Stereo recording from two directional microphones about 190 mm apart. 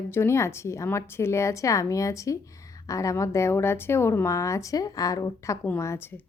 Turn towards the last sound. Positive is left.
turn(degrees=10)  # may be behind; listen again after turning